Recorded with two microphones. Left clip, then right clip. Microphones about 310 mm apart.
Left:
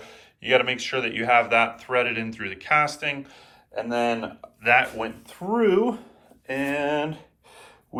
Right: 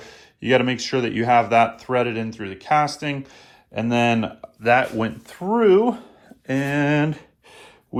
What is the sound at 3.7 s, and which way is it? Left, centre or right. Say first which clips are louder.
Speech: right 4 dB; right.